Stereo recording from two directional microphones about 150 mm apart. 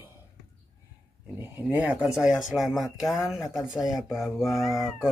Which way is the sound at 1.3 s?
10° right (ahead or behind).